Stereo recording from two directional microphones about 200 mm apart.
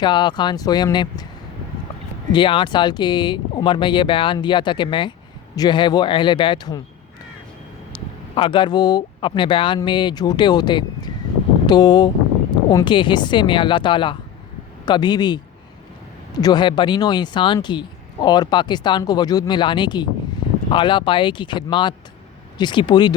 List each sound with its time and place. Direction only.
0.0 s speech: 20° left (ahead or behind)
2.3 s speech: 25° left (ahead or behind)
7.9 s speech: 25° left (ahead or behind)